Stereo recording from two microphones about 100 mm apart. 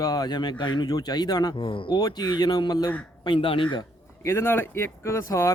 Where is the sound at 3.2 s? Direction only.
60° left (ahead or behind).